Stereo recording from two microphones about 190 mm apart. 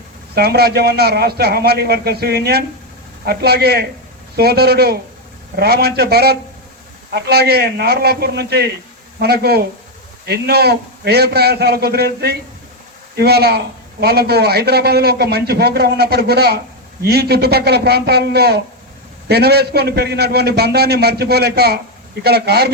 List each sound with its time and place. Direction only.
0.3 s a man's voice: 55° right (ahead or behind)